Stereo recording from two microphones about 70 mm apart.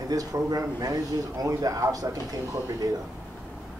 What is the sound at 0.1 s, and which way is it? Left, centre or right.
A man's voice, right.